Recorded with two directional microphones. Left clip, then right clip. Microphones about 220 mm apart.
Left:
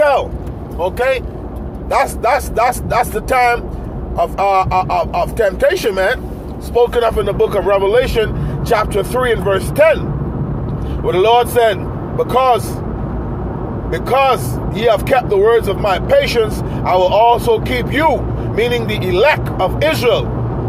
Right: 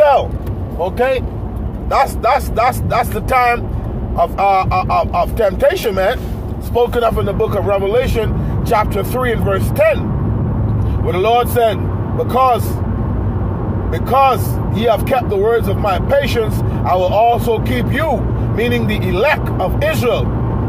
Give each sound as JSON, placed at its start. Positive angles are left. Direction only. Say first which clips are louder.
{"t": 0.0, "sound": "vehicle", "louder": "right 2 dB", "side_deg": 20}
{"t": 2.0, "sound": "speech", "louder": "right 1 dB", "side_deg": 15}
{"t": 11.1, "sound": "speech", "louder": "left 2 dB", "side_deg": 15}
{"t": 13.9, "sound": "speech", "louder": "right 1 dB", "side_deg": 15}